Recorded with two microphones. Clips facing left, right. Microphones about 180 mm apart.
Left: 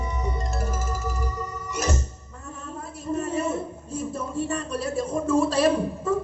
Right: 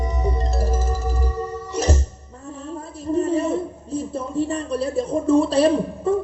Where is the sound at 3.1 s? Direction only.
30° right (ahead or behind).